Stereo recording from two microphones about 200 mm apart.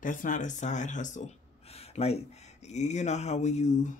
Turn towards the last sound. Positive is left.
turn(degrees=35)  # may be behind; listen again after turning